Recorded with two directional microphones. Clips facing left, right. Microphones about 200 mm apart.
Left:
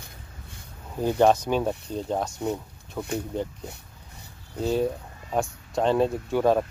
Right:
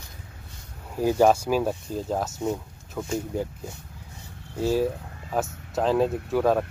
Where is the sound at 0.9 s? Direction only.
10° right (ahead or behind).